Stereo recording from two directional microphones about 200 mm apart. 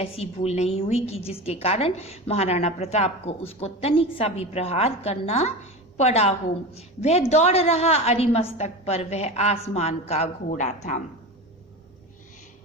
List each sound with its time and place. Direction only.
0.0 s a woman's voice: 30° left (ahead or behind)